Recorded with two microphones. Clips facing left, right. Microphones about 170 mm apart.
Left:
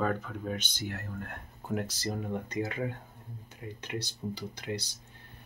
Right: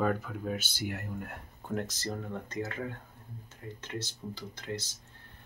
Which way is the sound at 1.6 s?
10° left (ahead or behind).